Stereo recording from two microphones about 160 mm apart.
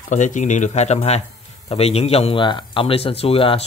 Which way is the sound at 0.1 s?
50° left (ahead or behind).